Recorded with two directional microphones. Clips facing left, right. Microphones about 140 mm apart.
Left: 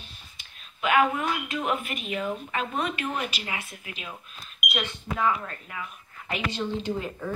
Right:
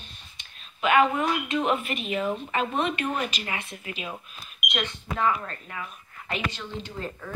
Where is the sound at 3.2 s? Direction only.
10° left (ahead or behind); by 4.5 s 10° right (ahead or behind).